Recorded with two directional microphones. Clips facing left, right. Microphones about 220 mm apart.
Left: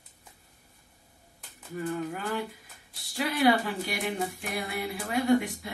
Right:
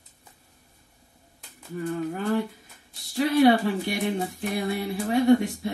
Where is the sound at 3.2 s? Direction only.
25° right (ahead or behind).